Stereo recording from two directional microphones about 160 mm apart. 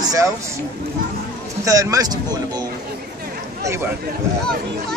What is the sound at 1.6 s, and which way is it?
Speech, 20° right (ahead or behind).